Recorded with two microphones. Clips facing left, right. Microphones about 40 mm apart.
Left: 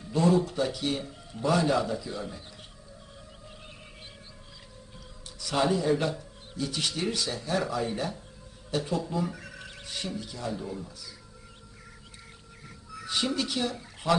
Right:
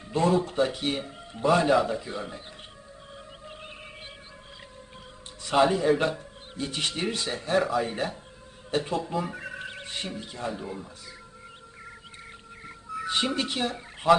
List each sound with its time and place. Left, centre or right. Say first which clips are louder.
0.0 s a man's voice: even; right
5.4 s a man's voice: right 4 dB; right
12.6 s a sound: right 7 dB; right